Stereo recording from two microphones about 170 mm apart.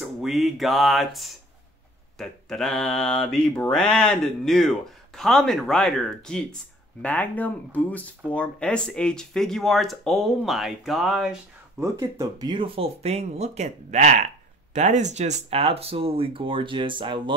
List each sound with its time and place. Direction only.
0.0 s mantra: centre (ahead or behind)
11.8 s speech: 15° right (ahead or behind)